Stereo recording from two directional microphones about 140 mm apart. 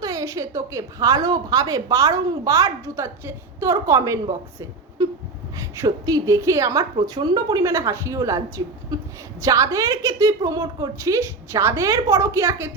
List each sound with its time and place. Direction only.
0.0 s a woman's voice: 25° right (ahead or behind)
5.5 s a woman's voice: 20° right (ahead or behind)